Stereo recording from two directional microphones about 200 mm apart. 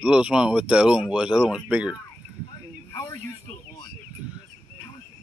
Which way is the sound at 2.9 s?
15° left (ahead or behind).